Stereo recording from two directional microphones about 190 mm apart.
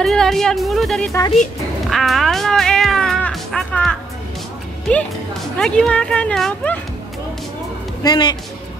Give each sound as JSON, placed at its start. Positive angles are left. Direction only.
{"t": 0.0, "sound": "speech", "side_deg": 0}
{"t": 1.9, "sound": "music", "side_deg": 0}
{"t": 4.9, "sound": "speech", "side_deg": 5}
{"t": 8.0, "sound": "speech", "side_deg": 20}